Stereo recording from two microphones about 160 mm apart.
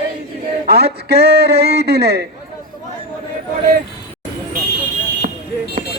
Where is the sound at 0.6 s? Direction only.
90° right.